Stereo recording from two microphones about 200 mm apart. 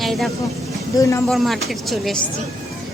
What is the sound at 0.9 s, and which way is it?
Speech, 15° left (ahead or behind).